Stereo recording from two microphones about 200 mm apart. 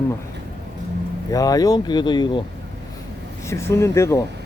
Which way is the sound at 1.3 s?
20° left (ahead or behind).